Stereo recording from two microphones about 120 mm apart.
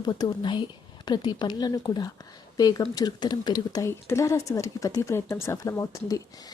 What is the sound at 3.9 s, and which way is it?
Speech, 25° left (ahead or behind).